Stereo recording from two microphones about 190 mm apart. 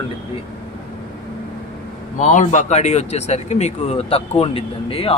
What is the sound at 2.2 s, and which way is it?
Speech, 40° left (ahead or behind).